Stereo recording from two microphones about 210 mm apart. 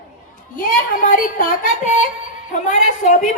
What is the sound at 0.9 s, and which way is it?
A woman's voice, 40° left (ahead or behind).